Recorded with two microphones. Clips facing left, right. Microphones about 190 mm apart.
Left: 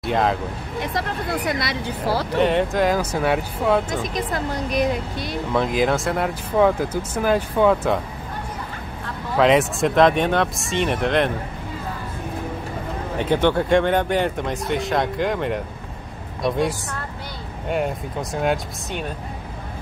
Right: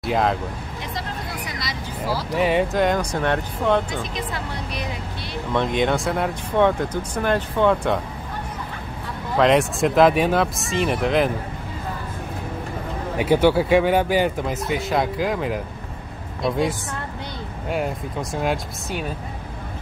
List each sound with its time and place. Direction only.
0.0 s speech: centre (ahead or behind)
0.7 s speech: 60° left (ahead or behind)
2.3 s speech: 5° right (ahead or behind)
3.9 s speech: 45° left (ahead or behind)
5.5 s speech: centre (ahead or behind)
9.4 s speech: centre (ahead or behind)
13.2 s speech: 10° right (ahead or behind)